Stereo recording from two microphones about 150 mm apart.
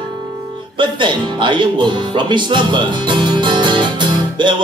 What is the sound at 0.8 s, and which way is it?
Music, 30° right (ahead or behind).